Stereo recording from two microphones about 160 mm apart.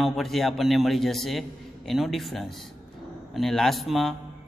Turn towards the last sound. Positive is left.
turn(degrees=0)  # may be behind; listen again after turning